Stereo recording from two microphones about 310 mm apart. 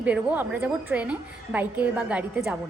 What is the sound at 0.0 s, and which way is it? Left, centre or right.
A woman's voice, centre.